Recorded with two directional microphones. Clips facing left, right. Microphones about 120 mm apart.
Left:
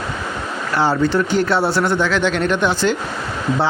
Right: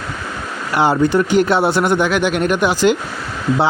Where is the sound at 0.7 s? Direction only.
15° right (ahead or behind).